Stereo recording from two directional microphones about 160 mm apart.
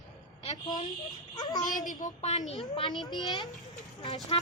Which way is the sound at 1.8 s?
55° left (ahead or behind).